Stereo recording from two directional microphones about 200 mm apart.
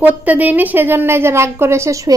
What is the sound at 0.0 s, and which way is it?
A woman's voice, 10° right (ahead or behind).